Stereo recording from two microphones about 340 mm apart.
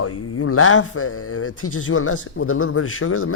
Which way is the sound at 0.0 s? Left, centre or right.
Left.